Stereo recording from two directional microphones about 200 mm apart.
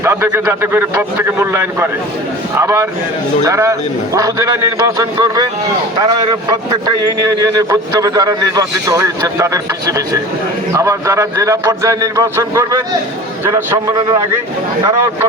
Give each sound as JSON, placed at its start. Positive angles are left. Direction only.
{"t": 0.0, "sound": "a man's voice", "side_deg": -15}
{"t": 6.5, "sound": "a man's voice", "side_deg": -20}
{"t": 10.8, "sound": "a man's voice", "side_deg": -15}